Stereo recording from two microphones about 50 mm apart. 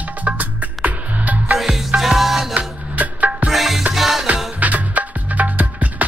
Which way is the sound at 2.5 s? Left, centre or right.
Right.